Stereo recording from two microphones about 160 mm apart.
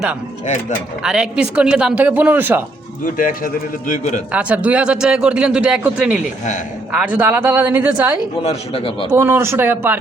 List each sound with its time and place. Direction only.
1.0 s a man's voice: 5° right (ahead or behind)
3.2 s speech: 60° left (ahead or behind)
4.3 s a man's voice: 10° right (ahead or behind)
8.4 s a man's voice: 35° left (ahead or behind)
9.1 s a man's voice: 15° right (ahead or behind)